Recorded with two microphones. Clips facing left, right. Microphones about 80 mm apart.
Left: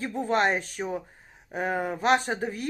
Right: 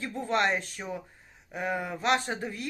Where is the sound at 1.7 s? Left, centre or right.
Left.